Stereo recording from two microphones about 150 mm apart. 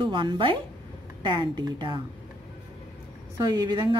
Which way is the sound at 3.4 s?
25° right (ahead or behind).